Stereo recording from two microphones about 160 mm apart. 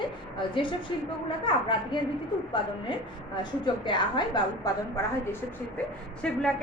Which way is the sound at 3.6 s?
30° left (ahead or behind).